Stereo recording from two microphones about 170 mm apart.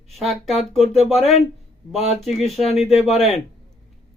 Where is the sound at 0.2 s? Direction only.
Centre (ahead or behind).